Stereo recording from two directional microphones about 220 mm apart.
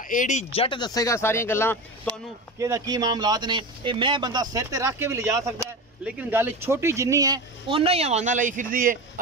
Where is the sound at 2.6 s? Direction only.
15° right (ahead or behind); by 8.9 s 40° right (ahead or behind).